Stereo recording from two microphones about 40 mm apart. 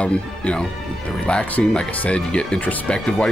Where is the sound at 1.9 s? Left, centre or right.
Left.